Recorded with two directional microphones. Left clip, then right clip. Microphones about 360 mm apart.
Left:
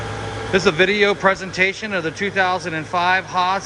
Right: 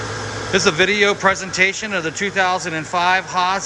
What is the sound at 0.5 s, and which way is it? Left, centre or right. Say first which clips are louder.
A man's voice: even; centre.